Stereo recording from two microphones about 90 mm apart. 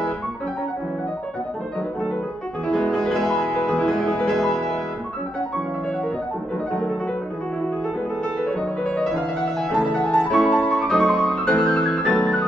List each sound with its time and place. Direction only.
2.7 s music: 5° left (ahead or behind)
8.5 s music: 10° left (ahead or behind)